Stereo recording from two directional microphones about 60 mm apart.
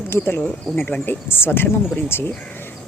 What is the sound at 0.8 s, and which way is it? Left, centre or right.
Speech, centre.